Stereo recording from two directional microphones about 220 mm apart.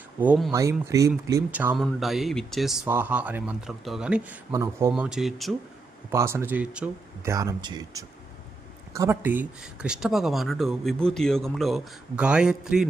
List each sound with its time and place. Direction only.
0.2 s speech: 5° right (ahead or behind)
0.5 s speech: 15° right (ahead or behind)
6.1 s speech: 10° right (ahead or behind)
7.3 s speech: 15° right (ahead or behind)